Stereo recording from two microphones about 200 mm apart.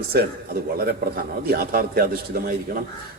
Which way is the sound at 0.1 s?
50° right (ahead or behind).